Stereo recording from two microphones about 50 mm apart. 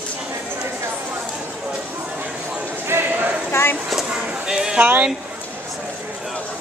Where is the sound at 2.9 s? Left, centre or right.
Right.